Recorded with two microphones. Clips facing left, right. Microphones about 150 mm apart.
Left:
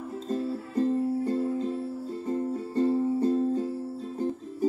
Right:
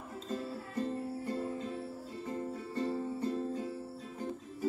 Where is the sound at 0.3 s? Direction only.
30° left (ahead or behind).